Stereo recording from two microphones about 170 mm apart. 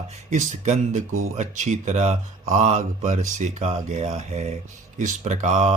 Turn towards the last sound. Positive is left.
turn(degrees=-45)  # may be behind; listen again after turning